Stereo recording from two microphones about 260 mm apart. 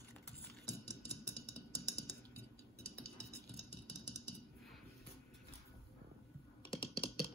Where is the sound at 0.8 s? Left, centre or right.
Left.